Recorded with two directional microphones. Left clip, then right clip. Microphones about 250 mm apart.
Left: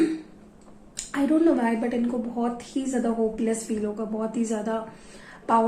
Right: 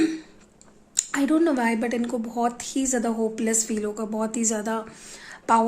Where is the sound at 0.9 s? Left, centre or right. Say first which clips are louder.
Right 1 dB; right.